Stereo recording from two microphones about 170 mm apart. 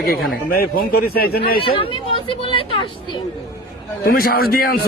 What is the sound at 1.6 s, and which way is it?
Speech, 30° left (ahead or behind).